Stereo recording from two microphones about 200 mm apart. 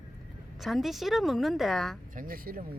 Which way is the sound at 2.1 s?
45° right (ahead or behind).